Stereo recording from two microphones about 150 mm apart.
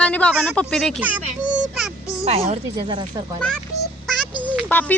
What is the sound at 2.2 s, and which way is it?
Speech, 45° right (ahead or behind).